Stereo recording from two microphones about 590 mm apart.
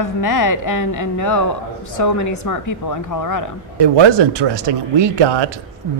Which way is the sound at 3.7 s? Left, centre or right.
Right.